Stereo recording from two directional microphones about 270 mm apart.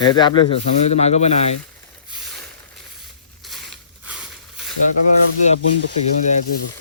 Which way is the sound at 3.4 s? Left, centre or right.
Centre.